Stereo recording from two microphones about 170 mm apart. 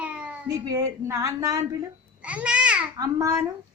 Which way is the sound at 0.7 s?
20° right (ahead or behind).